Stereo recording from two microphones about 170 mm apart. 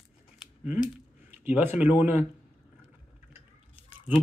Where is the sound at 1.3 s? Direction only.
10° right (ahead or behind).